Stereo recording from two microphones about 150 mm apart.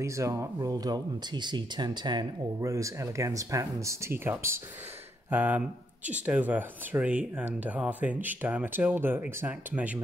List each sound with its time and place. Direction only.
0.0 s speech: 20° right (ahead or behind)